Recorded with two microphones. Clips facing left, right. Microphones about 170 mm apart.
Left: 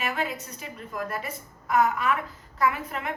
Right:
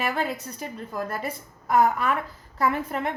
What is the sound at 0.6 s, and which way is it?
A woman's voice, 30° right (ahead or behind).